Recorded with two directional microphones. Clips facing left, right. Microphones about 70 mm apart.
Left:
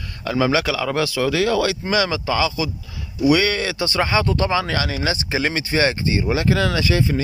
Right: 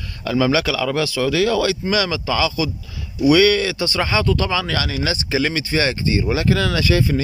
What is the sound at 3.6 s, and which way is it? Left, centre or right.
A man's voice, left.